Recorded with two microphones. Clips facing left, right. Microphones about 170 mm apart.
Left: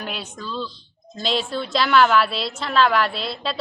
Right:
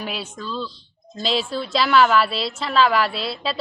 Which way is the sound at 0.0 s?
Centre (ahead or behind).